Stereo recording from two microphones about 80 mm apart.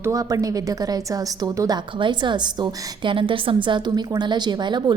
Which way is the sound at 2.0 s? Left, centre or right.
Right.